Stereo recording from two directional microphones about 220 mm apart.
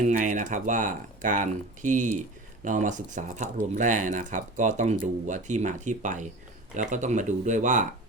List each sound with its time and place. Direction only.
0.0 s speech: 35° right (ahead or behind)